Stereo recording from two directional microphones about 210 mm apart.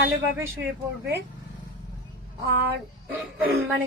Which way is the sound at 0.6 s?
55° right (ahead or behind).